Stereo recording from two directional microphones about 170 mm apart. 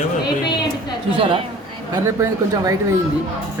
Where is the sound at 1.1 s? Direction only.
30° right (ahead or behind).